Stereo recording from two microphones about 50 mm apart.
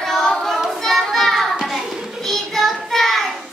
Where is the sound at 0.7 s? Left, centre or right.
Centre.